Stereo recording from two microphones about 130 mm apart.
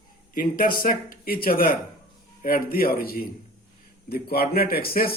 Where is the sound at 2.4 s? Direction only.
90° left.